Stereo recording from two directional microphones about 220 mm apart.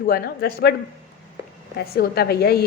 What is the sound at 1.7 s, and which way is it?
Speech, 45° left (ahead or behind).